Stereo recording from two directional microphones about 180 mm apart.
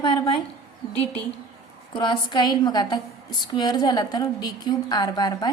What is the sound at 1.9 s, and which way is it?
A woman's voice, 25° left (ahead or behind).